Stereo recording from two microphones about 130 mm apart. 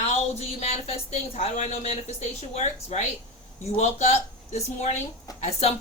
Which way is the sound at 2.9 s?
60° left (ahead or behind).